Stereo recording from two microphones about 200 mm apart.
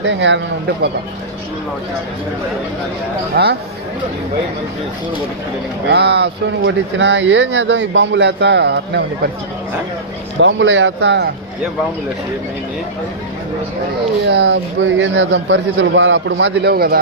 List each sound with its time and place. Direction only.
0.0 s speech: 65° right (ahead or behind)
3.3 s speech: 55° right (ahead or behind)
5.9 s speech: 55° right (ahead or behind)
10.4 s speech: 70° right (ahead or behind)
14.3 s speech: 60° right (ahead or behind)